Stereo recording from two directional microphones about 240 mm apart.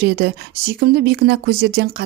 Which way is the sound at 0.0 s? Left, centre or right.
Right.